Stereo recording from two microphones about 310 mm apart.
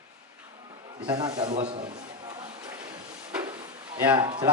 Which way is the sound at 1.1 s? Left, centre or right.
Centre.